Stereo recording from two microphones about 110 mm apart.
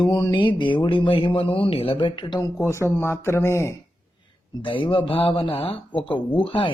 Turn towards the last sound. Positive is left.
turn(degrees=50)  # may be behind; listen again after turning